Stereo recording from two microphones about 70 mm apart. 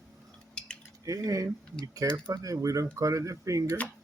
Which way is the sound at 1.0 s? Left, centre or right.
Right.